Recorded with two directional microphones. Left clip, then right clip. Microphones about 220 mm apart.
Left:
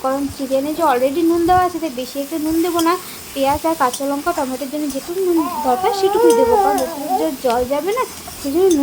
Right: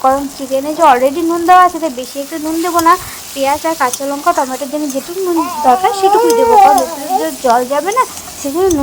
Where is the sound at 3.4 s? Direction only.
10° right (ahead or behind).